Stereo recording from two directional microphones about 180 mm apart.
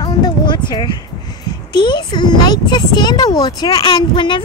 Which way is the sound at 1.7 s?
25° left (ahead or behind).